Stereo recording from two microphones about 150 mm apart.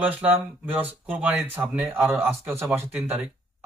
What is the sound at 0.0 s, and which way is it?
Speech, 10° right (ahead or behind).